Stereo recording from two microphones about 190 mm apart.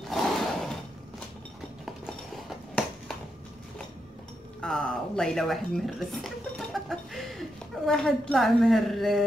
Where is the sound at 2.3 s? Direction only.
Centre (ahead or behind).